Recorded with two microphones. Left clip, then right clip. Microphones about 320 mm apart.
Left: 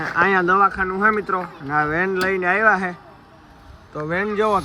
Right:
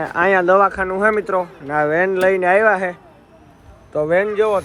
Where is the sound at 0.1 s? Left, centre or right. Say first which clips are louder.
Right 3 dB; centre.